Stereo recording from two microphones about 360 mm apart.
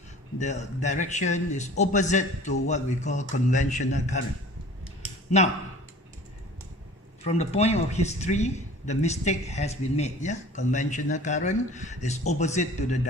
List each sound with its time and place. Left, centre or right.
0.3 s a man's voice: centre
5.3 s speech: centre
7.3 s a man's voice: centre